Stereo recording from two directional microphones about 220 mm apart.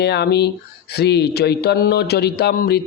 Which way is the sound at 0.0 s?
50° left (ahead or behind).